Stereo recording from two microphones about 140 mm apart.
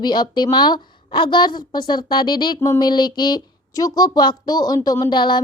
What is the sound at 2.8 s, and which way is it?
A woman's voice, 30° left (ahead or behind).